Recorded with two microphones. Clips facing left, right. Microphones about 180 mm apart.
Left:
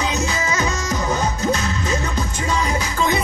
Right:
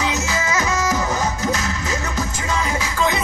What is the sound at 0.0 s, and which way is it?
Music, 35° left (ahead or behind).